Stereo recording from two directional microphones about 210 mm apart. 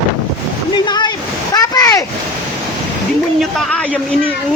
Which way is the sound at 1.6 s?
15° left (ahead or behind).